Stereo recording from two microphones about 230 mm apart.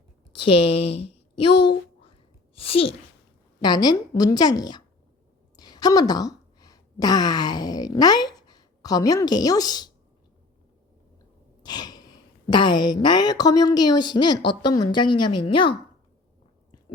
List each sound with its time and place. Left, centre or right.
0.3 s speech: left
0.8 s a woman's voice: left
1.4 s speech: left
2.6 s a woman's voice: left
11.6 s a sound: centre
12.5 s a woman's voice: centre